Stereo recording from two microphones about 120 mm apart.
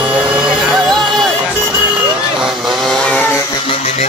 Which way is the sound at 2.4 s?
5° right (ahead or behind).